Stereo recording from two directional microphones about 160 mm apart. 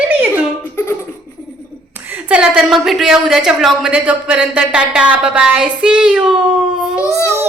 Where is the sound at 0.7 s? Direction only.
15° left (ahead or behind).